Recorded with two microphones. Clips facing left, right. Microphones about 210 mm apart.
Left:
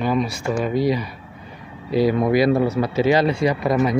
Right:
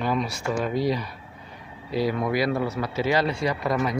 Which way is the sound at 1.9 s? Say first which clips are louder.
Left 7 dB; 20° left (ahead or behind).